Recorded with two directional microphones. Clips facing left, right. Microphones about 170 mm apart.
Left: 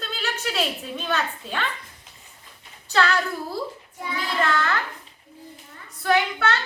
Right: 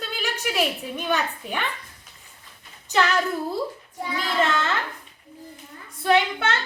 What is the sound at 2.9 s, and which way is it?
A woman's voice, 20° right (ahead or behind).